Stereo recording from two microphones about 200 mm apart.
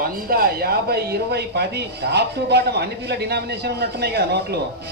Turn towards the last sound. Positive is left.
turn(degrees=-55)  # may be behind; listen again after turning